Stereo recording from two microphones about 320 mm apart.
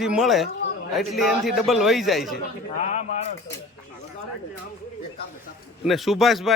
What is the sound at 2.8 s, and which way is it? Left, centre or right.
Speech, left.